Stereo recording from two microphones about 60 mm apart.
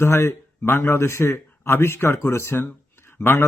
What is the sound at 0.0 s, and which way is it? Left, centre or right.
Speech, left.